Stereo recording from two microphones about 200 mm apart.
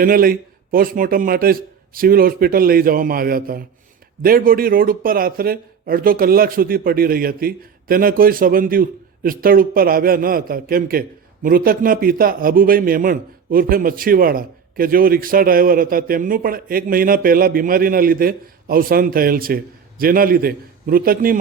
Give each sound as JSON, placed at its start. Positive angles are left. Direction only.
{"t": 0.0, "sound": "a man's voice", "side_deg": -45}